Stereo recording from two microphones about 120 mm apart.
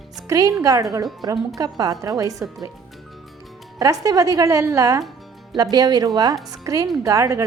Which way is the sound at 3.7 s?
30° right (ahead or behind).